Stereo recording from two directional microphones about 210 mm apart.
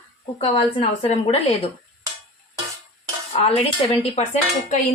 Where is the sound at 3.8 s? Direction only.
25° left (ahead or behind).